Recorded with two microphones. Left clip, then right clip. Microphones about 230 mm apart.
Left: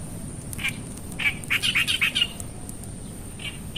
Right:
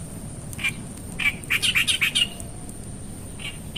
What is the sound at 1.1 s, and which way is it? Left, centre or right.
Bird, right.